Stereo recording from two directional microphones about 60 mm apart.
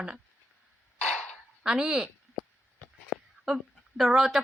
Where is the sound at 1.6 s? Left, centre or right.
Centre.